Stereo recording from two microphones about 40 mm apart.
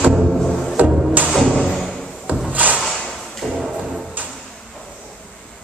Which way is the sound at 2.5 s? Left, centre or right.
Right.